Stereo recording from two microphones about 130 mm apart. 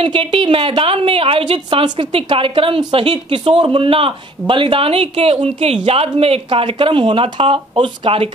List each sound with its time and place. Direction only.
0.0 s a woman's voice: 45° right (ahead or behind)